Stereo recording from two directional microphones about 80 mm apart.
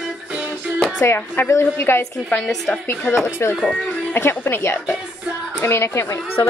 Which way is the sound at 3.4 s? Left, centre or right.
Left.